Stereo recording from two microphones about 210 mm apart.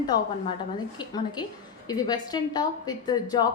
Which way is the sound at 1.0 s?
20° left (ahead or behind).